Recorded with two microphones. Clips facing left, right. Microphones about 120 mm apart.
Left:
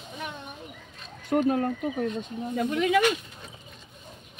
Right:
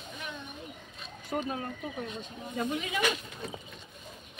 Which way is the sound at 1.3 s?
55° left (ahead or behind).